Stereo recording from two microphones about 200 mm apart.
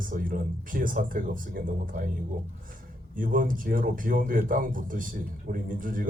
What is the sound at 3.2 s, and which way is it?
Speech, 45° right (ahead or behind).